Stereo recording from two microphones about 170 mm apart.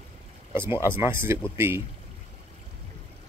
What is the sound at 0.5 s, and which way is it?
Speech, 15° right (ahead or behind).